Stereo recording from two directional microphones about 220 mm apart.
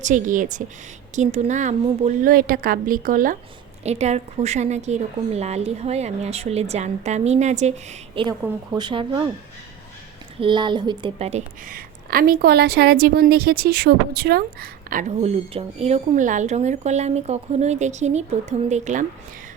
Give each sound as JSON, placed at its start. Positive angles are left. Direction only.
{"t": 0.0, "sound": "a woman's voice", "side_deg": -35}
{"t": 8.1, "sound": "speech", "side_deg": -20}
{"t": 10.4, "sound": "speech", "side_deg": -20}
{"t": 11.7, "sound": "a woman's voice", "side_deg": -40}